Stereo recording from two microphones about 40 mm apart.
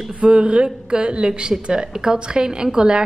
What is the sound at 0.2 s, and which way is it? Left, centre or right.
A woman's voice, right.